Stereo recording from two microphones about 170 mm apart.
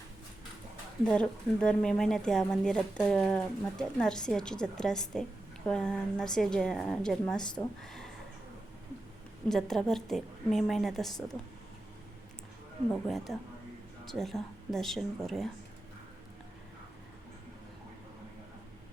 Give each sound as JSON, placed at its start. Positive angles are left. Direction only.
{"t": 1.0, "sound": "speech", "side_deg": 5}
{"t": 9.5, "sound": "speech", "side_deg": 0}
{"t": 12.9, "sound": "speech", "side_deg": 0}